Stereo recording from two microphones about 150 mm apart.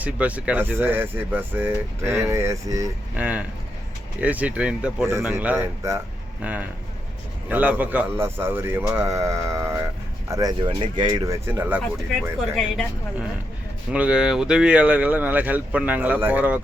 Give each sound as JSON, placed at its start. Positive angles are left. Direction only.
{"t": 0.0, "sound": "speech", "side_deg": -10}
{"t": 3.2, "sound": "speech", "side_deg": -10}
{"t": 10.6, "sound": "speech", "side_deg": -35}
{"t": 11.4, "sound": "speech", "side_deg": -15}
{"t": 13.9, "sound": "speech", "side_deg": -5}